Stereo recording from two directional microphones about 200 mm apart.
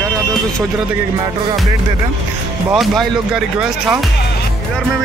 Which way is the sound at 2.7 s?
Centre (ahead or behind).